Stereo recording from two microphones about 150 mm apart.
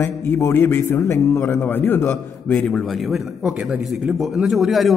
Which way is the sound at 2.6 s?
Centre (ahead or behind).